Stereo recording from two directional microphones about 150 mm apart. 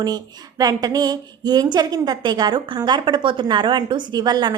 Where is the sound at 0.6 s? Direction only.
25° right (ahead or behind).